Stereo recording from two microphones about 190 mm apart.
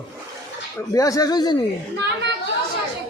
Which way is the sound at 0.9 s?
20° left (ahead or behind).